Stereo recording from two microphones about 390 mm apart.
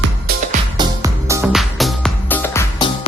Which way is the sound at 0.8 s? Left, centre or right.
Centre.